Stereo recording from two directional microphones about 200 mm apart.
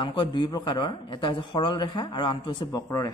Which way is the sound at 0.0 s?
25° left (ahead or behind).